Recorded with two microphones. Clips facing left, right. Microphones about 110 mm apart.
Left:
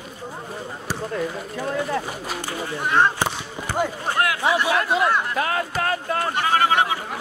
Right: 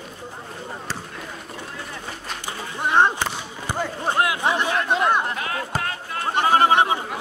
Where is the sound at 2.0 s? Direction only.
5° left (ahead or behind).